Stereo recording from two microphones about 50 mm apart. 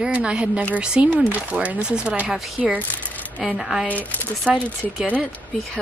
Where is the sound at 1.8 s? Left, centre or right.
Centre.